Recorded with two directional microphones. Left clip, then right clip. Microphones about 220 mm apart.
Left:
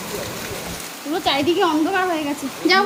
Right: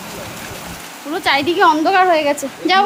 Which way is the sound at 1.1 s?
10° right (ahead or behind).